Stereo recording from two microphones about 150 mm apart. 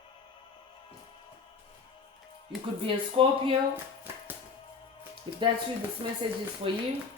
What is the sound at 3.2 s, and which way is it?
Speech, 40° right (ahead or behind).